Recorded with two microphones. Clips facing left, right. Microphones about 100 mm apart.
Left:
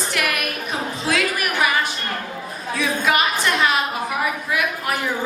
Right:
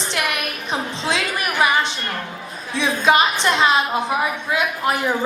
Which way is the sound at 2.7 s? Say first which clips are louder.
Right 3 dB; 25° right (ahead or behind).